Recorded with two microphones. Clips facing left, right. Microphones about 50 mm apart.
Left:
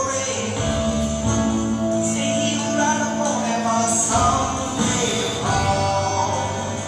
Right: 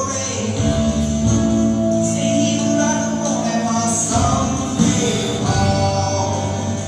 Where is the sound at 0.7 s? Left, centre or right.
Centre.